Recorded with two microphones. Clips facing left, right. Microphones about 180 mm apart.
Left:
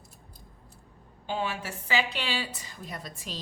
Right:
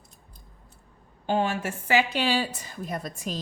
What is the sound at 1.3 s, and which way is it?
A woman's voice, 50° right (ahead or behind).